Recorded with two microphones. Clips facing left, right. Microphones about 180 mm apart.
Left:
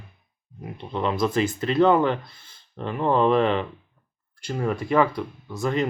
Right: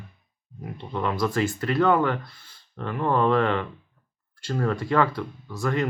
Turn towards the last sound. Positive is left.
turn(degrees=20)  # may be behind; listen again after turning